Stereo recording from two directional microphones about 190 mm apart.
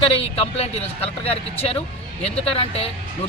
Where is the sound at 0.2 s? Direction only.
30° left (ahead or behind).